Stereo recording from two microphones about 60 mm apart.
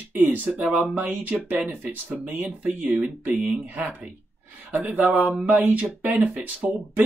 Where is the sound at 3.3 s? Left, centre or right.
Centre.